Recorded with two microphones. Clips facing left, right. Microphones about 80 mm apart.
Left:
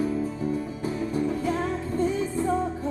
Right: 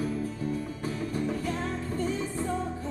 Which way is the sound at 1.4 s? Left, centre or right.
Centre.